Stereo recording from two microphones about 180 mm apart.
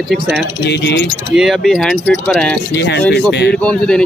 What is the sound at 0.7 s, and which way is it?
Speech, 75° left (ahead or behind).